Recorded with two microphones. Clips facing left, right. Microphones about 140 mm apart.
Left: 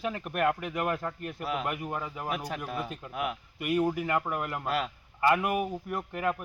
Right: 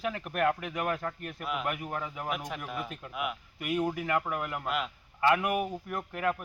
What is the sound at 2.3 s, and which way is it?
A man's voice, 35° left (ahead or behind).